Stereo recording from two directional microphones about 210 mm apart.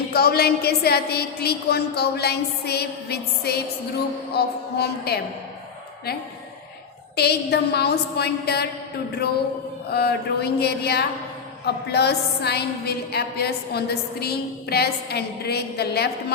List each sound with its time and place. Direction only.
0.1 s a woman's voice: 50° left (ahead or behind)
7.2 s a woman's voice: 50° left (ahead or behind)
9.9 s a woman's voice: 50° left (ahead or behind)